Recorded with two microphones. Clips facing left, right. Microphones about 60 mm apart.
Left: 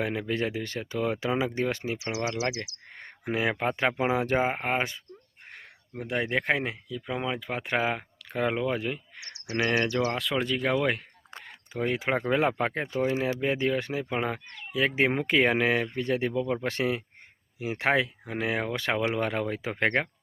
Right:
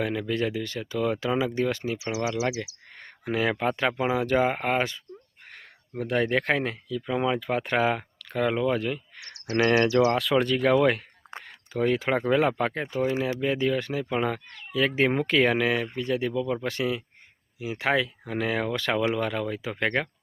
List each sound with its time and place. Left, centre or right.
0.0 s speech: left
6.0 s speech: centre
7.2 s speech: centre; by 18.1 s left
18.3 s speech: centre